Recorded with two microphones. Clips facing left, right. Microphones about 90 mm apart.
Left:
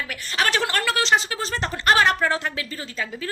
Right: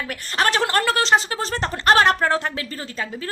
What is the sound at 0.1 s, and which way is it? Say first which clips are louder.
A woman's voice: right 3 dB; 40° right (ahead or behind).